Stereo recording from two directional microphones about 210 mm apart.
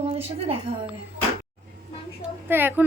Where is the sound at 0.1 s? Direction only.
25° right (ahead or behind).